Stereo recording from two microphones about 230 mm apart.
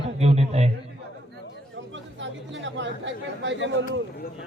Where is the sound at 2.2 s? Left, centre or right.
Right.